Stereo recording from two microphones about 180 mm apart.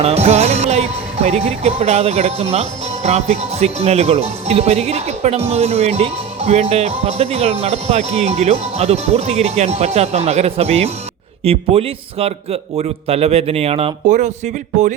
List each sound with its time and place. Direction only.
0.0 s music: 35° right (ahead or behind)